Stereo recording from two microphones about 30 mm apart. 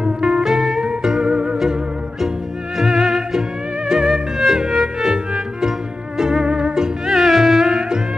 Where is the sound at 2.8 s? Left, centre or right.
Right.